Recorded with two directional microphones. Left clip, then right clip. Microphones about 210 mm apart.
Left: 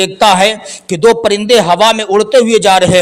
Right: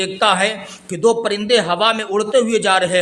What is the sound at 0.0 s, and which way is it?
A man's voice, 35° left (ahead or behind).